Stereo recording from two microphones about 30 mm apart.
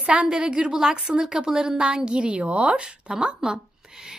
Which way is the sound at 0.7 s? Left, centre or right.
Centre.